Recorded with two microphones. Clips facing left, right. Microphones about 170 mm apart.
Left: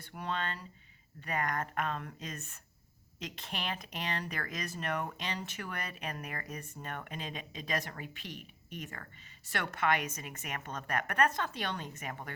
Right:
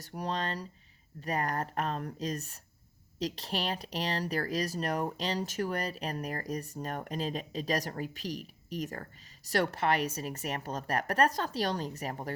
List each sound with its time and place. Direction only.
0.0 s speech: 35° right (ahead or behind)